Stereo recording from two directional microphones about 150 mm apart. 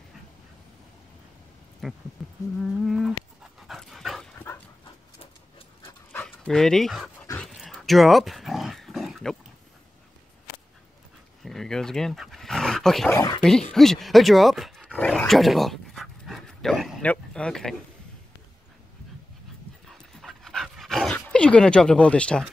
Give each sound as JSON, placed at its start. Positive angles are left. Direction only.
{"t": 1.8, "sound": "speech", "side_deg": 0}
{"t": 2.2, "sound": "a sound", "side_deg": 0}
{"t": 3.6, "sound": "dog", "side_deg": 0}
{"t": 6.1, "sound": "speech", "side_deg": 5}
{"t": 7.3, "sound": "dog", "side_deg": 0}
{"t": 11.4, "sound": "dog", "side_deg": 5}
{"t": 13.1, "sound": "speech", "side_deg": 20}
{"t": 13.4, "sound": "dog", "side_deg": 5}
{"t": 17.0, "sound": "speech", "side_deg": 10}
{"t": 19.9, "sound": "dog", "side_deg": 0}